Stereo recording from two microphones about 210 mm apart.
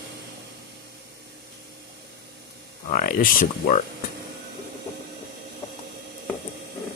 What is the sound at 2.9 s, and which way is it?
Speech, 40° left (ahead or behind).